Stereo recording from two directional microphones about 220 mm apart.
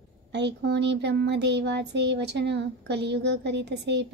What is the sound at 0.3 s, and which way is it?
Speech, 50° right (ahead or behind).